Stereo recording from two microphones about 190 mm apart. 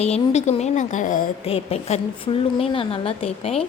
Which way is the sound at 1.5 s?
30° left (ahead or behind).